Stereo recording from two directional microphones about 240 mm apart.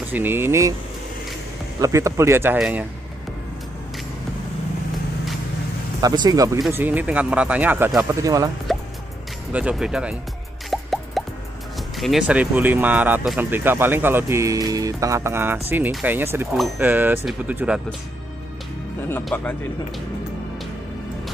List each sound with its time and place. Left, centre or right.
0.1 s speech: centre
1.8 s speech: centre
5.9 s speech: centre
8.7 s music: centre
9.5 s speech: centre
10.7 s plop: centre
12.0 s speech: centre
19.0 s speech: centre